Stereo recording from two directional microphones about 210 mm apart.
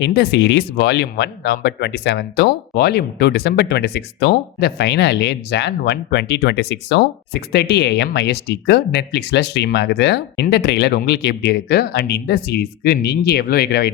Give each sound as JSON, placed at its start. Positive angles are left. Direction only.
{"t": 0.0, "sound": "speech", "side_deg": 55}